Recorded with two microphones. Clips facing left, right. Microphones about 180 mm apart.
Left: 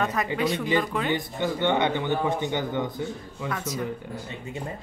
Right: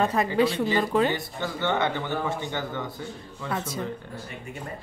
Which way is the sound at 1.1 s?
15° left (ahead or behind).